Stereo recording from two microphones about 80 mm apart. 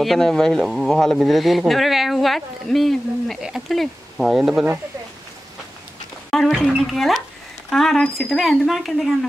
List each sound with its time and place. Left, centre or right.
0.0 s speech: centre
6.3 s speech: centre